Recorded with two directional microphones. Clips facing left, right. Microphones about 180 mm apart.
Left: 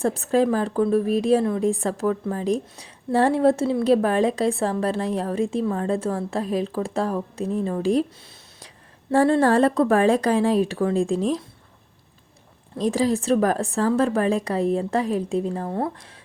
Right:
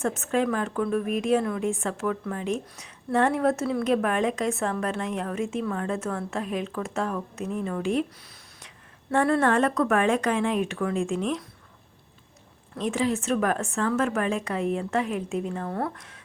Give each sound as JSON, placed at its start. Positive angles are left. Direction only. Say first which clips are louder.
{"t": 0.0, "sound": "a woman's voice", "louder": "left 5 dB", "side_deg": 35}
{"t": 12.7, "sound": "a woman's voice", "louder": "left 4 dB", "side_deg": 35}